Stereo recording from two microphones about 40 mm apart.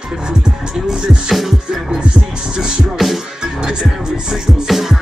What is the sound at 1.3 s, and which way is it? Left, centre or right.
Music, centre.